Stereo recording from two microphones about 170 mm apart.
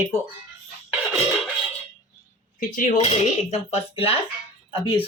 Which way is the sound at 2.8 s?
40° left (ahead or behind).